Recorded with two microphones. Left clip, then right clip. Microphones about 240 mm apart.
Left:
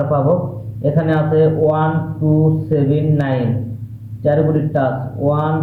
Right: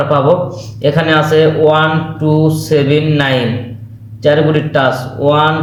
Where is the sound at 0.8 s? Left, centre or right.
Right.